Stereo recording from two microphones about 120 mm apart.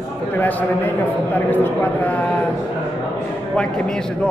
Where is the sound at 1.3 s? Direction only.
15° left (ahead or behind).